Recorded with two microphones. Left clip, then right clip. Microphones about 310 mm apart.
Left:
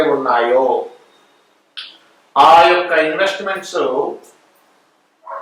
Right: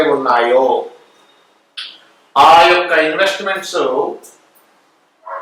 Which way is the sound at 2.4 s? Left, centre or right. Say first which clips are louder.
Right 1 dB; centre.